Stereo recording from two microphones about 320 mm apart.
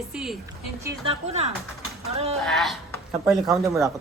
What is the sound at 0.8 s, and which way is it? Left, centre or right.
A woman's voice, centre.